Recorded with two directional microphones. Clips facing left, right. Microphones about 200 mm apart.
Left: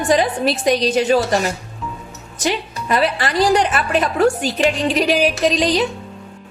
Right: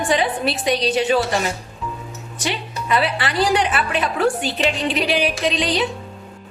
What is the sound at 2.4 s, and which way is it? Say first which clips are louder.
A woman's voice: left 3 dB; 45° left (ahead or behind).